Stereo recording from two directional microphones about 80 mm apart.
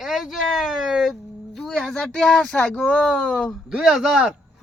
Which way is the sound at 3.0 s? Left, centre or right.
Centre.